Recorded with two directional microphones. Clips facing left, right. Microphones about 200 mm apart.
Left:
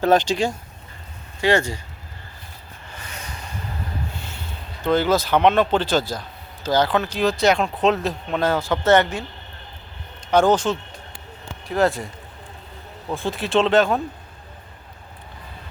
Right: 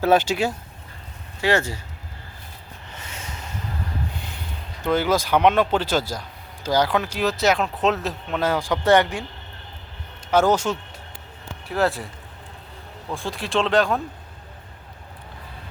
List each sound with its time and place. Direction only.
0.0 s speech: 5° right (ahead or behind)
2.9 s vehicle: 25° right (ahead or behind)
4.8 s speech: 10° right (ahead or behind)
10.3 s speech: 10° right (ahead or behind)
13.1 s speech: centre (ahead or behind)